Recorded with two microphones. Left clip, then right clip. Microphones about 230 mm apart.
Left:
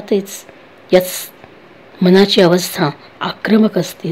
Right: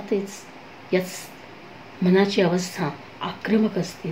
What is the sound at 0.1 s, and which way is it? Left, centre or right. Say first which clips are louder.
Speech: left 8 dB; left.